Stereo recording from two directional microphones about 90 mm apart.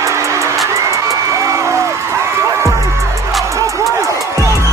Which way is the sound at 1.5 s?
35° right (ahead or behind).